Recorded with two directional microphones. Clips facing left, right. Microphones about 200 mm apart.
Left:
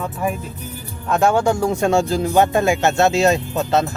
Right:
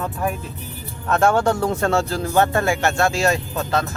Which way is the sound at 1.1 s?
10° left (ahead or behind).